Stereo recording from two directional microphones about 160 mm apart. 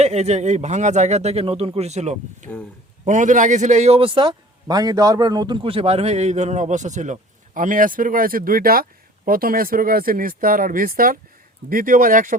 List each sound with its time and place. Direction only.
0.0 s a man's voice: 45° right (ahead or behind)